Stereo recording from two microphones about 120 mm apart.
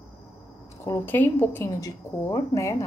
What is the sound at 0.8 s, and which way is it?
Speech, 15° left (ahead or behind).